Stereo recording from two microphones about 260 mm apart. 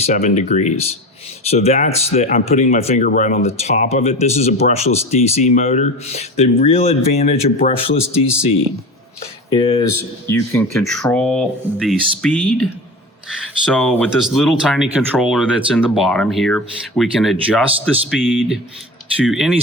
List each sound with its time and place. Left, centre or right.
0.0 s speech: left; by 12.6 s centre
13.7 s speech: centre